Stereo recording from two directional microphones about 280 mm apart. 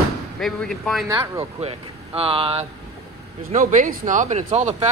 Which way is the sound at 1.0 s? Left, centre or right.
Centre.